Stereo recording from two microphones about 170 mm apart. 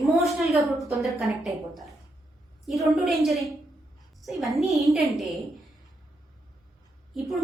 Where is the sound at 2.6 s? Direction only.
Centre (ahead or behind).